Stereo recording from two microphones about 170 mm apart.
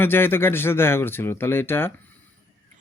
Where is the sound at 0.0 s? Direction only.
15° left (ahead or behind).